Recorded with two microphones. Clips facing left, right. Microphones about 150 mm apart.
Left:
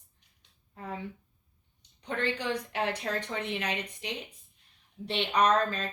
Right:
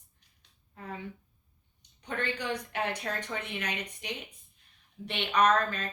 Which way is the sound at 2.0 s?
30° left (ahead or behind).